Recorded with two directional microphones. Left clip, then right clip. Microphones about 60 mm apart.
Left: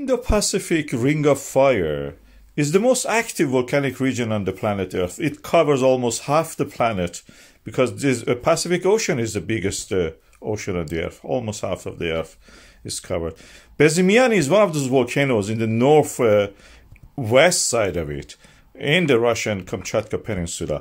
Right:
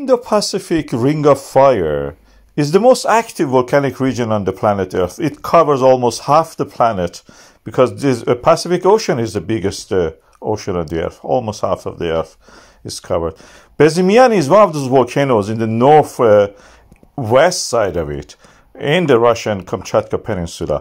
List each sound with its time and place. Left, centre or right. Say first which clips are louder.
0.0 s a man's voice: right 7 dB; right
3.3 s a man's voice: right 6 dB; right
5.7 s a man's voice: right 6 dB; right
13.3 s speech: right 6 dB; right